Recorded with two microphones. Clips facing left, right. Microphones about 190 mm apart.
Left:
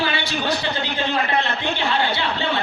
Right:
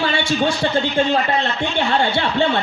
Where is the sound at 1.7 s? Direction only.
55° right (ahead or behind).